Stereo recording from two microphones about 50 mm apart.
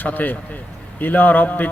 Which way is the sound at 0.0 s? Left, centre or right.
Left.